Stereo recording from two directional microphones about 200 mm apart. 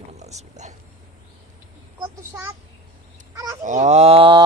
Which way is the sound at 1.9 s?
15° right (ahead or behind).